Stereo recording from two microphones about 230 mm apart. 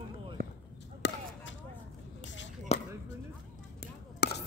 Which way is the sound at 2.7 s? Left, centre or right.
Left.